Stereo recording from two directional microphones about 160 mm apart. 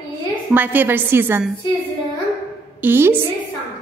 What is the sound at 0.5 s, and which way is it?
Speech, 10° right (ahead or behind).